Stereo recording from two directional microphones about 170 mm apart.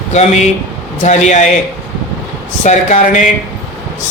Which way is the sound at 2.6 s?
45° left (ahead or behind).